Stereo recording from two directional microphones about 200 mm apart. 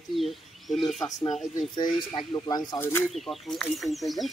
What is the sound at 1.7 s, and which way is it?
Speech, 20° left (ahead or behind).